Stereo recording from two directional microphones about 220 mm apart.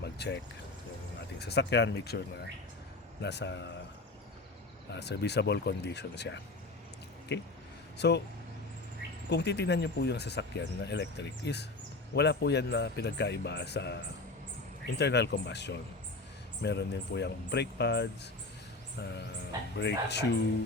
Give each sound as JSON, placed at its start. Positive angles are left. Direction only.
{"t": 0.0, "sound": "a sound", "side_deg": 50}
{"t": 1.4, "sound": "speech", "side_deg": 50}
{"t": 4.9, "sound": "speech", "side_deg": 50}
{"t": 9.3, "sound": "speech", "side_deg": 50}
{"t": 19.7, "sound": "speech", "side_deg": 50}